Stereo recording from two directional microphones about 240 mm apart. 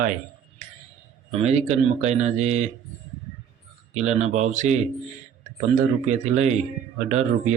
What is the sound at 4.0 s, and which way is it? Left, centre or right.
Speech, right.